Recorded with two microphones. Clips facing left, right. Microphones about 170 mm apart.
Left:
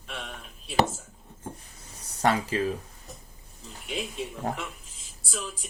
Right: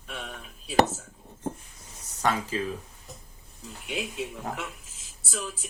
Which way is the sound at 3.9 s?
5° right (ahead or behind).